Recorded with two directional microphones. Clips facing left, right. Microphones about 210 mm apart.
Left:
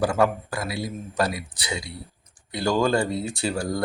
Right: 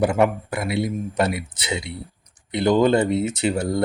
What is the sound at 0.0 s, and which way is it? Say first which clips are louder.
Speech: right 3 dB; 20° right (ahead or behind).